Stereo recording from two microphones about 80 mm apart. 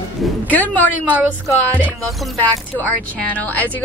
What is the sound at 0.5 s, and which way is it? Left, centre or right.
Speech, left.